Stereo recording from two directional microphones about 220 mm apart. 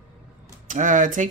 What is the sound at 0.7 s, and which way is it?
Speech, 35° right (ahead or behind).